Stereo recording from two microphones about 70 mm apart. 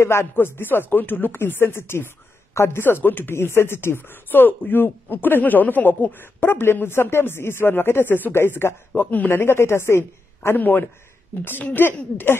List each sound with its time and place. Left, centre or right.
0.0 s speech: left